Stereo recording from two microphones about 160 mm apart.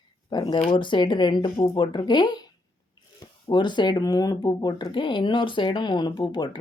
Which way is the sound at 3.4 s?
30° left (ahead or behind).